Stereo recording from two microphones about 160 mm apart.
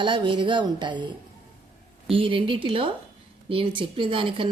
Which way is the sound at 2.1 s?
35° right (ahead or behind).